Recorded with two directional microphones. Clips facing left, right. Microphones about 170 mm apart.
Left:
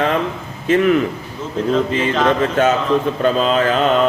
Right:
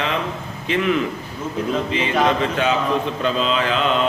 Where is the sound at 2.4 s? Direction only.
45° left (ahead or behind).